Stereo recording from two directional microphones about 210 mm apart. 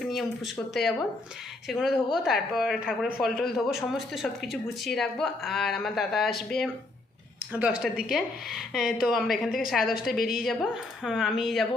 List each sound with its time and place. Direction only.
0.0 s a woman's voice: centre (ahead or behind)
7.5 s a woman's voice: 5° right (ahead or behind)